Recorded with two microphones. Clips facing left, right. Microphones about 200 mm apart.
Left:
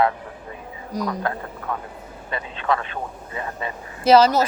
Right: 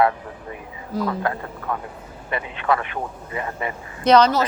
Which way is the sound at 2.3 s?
20° right (ahead or behind).